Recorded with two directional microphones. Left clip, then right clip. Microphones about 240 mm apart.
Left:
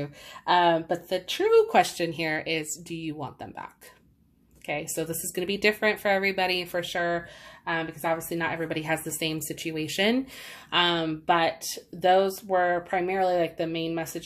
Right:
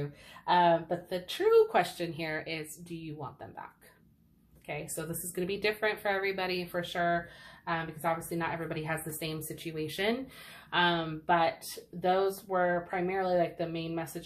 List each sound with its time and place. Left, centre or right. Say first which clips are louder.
0.0 s a woman's voice: left 5 dB; left